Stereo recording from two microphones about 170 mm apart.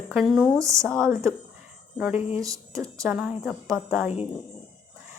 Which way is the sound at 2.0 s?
5° right (ahead or behind).